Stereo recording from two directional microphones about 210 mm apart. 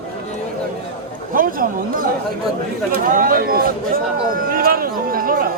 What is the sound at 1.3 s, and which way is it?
Speech, 40° right (ahead or behind).